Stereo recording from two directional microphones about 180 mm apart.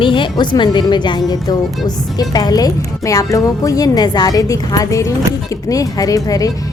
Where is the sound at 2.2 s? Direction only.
20° left (ahead or behind).